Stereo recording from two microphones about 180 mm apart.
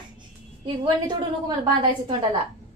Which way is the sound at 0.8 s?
25° right (ahead or behind).